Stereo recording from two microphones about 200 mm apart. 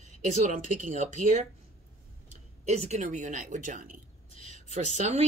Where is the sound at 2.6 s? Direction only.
35° right (ahead or behind).